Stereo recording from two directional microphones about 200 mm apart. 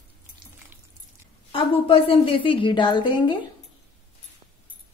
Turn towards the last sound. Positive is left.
turn(degrees=25)  # may be behind; listen again after turning